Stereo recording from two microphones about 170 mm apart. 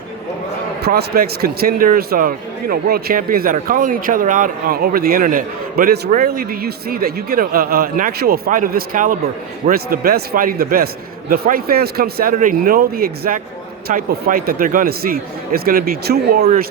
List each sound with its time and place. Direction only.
0.8 s a man's voice: 70° right (ahead or behind)